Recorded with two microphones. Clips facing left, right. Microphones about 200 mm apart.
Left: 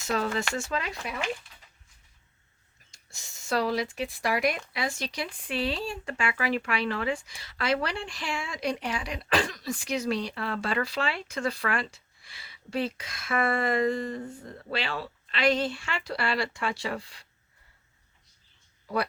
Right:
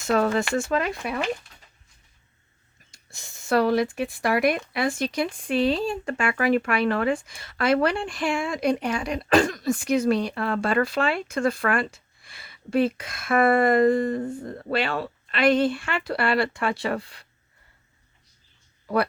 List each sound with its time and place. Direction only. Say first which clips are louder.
0.0 s speech: right 7 dB; 55° right (ahead or behind)
1.2 s speech: right 5 dB; 40° right (ahead or behind)
2.9 s speech: right 5 dB; 55° right (ahead or behind)
18.9 s speech: right 6 dB; 60° right (ahead or behind)